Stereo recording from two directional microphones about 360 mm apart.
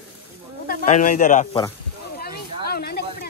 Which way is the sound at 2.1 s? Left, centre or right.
Left.